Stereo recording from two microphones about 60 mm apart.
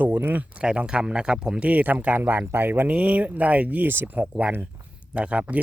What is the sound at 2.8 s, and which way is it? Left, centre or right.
Speech, right.